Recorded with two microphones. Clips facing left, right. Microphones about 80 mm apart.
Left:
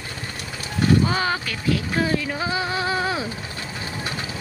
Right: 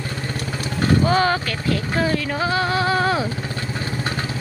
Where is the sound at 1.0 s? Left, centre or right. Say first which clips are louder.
Right 5 dB; centre.